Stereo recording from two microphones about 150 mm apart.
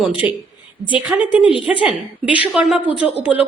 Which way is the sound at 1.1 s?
10° right (ahead or behind).